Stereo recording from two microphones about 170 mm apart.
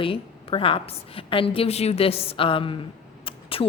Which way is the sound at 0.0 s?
30° left (ahead or behind).